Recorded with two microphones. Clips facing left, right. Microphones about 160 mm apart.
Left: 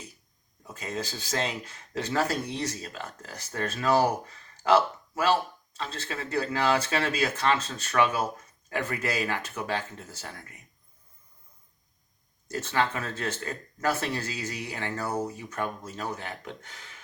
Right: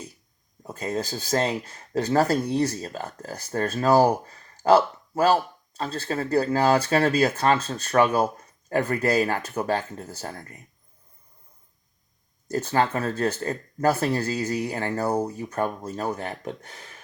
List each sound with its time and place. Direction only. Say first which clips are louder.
0.6 s speech: right 6 dB; 40° right (ahead or behind)
12.5 s speech: right 5 dB; 40° right (ahead or behind)